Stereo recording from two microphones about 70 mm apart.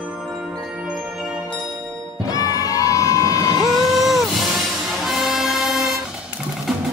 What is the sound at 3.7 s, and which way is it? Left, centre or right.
Vehicle, centre.